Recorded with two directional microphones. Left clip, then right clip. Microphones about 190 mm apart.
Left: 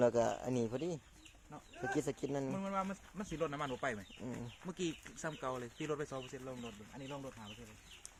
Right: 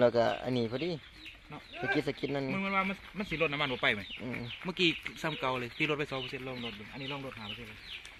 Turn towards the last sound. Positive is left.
turn(degrees=-30)  # may be behind; listen again after turning